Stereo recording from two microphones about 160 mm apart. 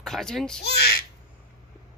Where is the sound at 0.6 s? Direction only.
85° left.